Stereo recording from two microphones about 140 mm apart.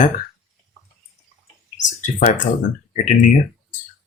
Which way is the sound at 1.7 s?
65° left (ahead or behind).